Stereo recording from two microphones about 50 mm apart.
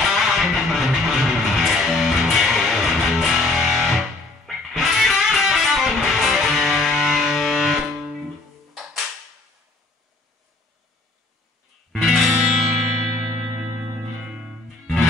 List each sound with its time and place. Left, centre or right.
0.0 s music: centre
11.9 s music: centre
13.2 s music: centre